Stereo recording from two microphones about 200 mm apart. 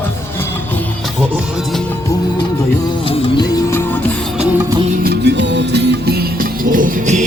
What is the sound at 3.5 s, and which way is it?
Music, 10° left (ahead or behind).